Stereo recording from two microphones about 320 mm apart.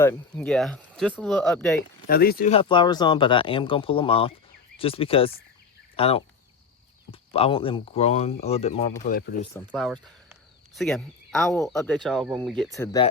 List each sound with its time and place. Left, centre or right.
0.0 s speech: centre
2.0 s speech: left
9.7 s speech: centre